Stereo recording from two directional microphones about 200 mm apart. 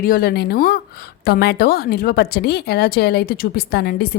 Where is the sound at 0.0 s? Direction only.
45° left (ahead or behind).